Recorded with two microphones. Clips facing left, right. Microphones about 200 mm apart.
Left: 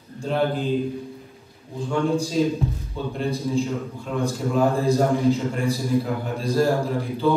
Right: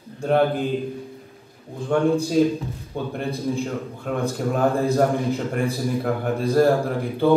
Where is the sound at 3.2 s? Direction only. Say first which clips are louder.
Left 3 dB; 60° right (ahead or behind).